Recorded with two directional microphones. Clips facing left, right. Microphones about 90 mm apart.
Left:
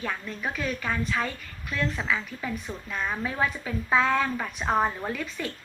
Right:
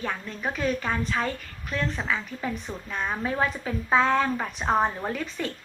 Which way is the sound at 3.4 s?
30° right (ahead or behind).